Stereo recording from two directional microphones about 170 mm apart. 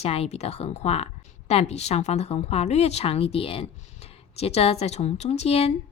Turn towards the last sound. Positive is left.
turn(degrees=35)  # may be behind; listen again after turning